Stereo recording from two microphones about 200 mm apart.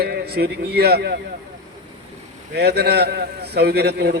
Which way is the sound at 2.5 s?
55° right (ahead or behind).